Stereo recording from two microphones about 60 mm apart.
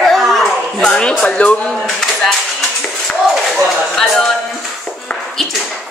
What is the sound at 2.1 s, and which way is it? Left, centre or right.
Music, centre.